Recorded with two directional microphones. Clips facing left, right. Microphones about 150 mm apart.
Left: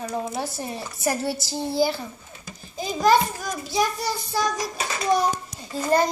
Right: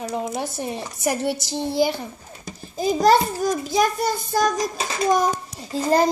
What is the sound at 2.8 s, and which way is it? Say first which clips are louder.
A child's voice: right 3 dB; 40° right (ahead or behind).